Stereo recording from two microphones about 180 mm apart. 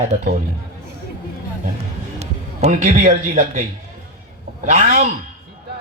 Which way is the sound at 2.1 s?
40° right (ahead or behind).